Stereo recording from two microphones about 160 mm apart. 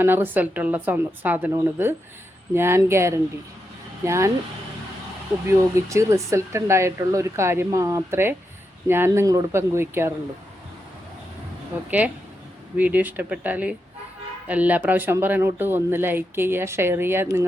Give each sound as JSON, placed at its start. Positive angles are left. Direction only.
{"t": 0.0, "sound": "speech", "side_deg": -15}
{"t": 5.5, "sound": "speech", "side_deg": -20}
{"t": 11.9, "sound": "speech", "side_deg": -10}